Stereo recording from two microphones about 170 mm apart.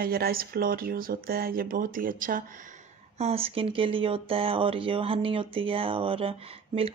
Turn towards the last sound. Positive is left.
turn(degrees=-35)  # may be behind; listen again after turning